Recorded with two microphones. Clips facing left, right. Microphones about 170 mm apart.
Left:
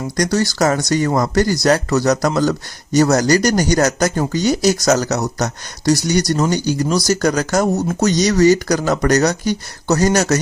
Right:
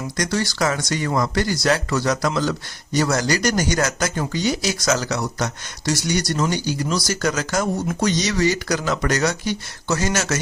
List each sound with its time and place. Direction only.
0.2 s speech: 40° left (ahead or behind)